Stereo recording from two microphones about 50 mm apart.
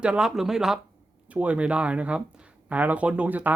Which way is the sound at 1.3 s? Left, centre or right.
Right.